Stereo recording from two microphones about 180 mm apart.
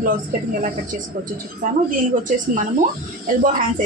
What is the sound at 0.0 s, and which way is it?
Speech, 50° right (ahead or behind).